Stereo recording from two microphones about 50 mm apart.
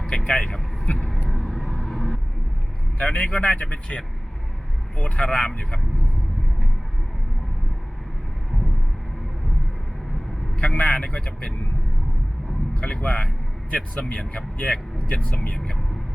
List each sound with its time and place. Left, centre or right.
0.0 s vehicle: centre
1.3 s vehicle: centre
3.0 s speech: left
10.6 s speech: left
12.7 s speech: left
13.1 s speech: centre
13.7 s speech: left